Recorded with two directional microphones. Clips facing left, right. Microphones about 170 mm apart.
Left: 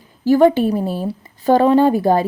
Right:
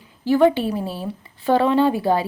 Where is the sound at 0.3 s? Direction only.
40° left (ahead or behind).